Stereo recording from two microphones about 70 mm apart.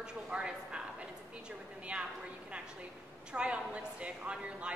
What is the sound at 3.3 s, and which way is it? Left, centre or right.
Speech, centre.